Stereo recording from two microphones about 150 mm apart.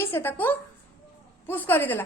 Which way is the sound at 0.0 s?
15° left (ahead or behind).